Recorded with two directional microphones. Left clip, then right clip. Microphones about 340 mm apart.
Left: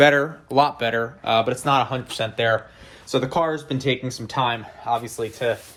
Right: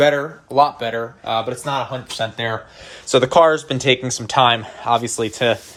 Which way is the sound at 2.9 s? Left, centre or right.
Right.